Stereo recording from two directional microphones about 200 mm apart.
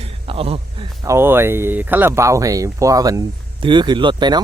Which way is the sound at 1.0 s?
15° right (ahead or behind).